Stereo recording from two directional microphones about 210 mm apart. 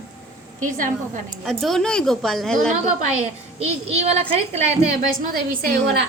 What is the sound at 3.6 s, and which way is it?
Speech, 30° right (ahead or behind).